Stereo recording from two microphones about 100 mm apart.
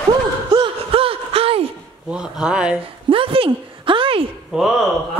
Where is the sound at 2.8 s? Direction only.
65° right (ahead or behind).